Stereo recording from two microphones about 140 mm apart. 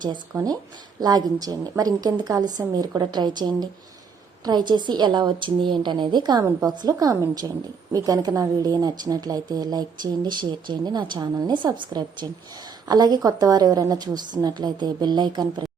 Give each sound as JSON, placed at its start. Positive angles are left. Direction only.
{"t": 0.3, "sound": "a woman's voice", "side_deg": -30}